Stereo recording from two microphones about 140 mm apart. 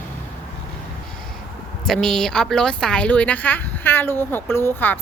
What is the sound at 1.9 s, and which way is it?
A woman's voice, 5° left (ahead or behind).